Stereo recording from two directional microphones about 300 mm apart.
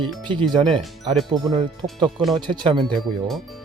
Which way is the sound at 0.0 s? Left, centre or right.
Centre.